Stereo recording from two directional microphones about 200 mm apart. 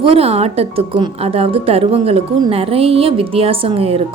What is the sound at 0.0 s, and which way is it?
A woman's voice, 30° right (ahead or behind).